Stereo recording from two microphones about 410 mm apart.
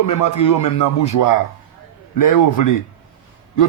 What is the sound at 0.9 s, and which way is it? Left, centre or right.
Speech, left.